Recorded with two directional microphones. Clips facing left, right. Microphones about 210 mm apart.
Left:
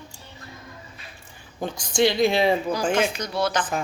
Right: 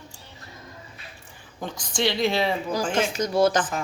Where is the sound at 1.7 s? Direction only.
10° left (ahead or behind).